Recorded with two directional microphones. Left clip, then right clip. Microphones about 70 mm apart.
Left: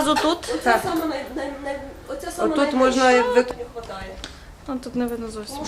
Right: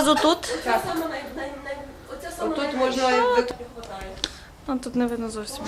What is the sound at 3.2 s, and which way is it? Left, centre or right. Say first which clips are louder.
A woman's voice: left 2 dB; centre.